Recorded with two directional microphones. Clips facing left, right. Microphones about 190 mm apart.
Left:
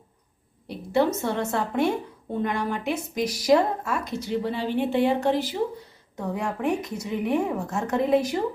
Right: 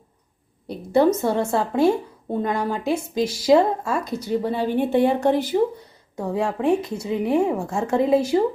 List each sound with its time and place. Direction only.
0.9 s speech: 40° right (ahead or behind)
4.3 s a woman's voice: 45° right (ahead or behind)
6.1 s speech: 30° right (ahead or behind)